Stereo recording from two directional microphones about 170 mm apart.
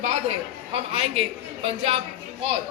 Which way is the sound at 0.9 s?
35° right (ahead or behind).